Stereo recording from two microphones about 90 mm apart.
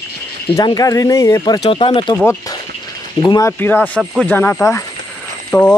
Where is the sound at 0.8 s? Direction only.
40° left (ahead or behind).